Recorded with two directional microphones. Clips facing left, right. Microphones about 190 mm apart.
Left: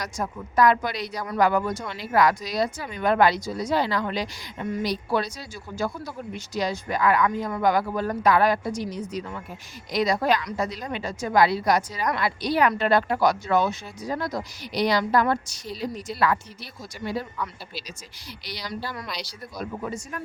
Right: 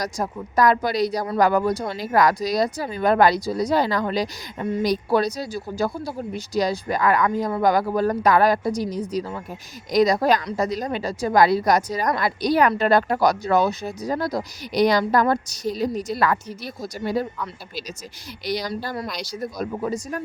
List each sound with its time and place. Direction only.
0.0 s speech: 35° right (ahead or behind)
18.4 s speech: 45° right (ahead or behind)